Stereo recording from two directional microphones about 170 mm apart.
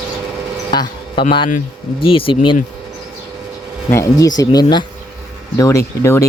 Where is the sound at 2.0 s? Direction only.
30° left (ahead or behind).